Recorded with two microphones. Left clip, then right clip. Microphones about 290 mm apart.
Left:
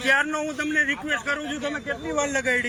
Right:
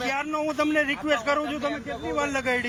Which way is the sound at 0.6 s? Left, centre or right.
Centre.